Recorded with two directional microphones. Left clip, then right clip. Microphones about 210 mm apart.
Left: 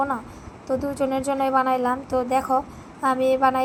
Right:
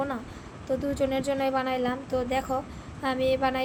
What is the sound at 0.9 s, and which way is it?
A woman's voice, 10° left (ahead or behind).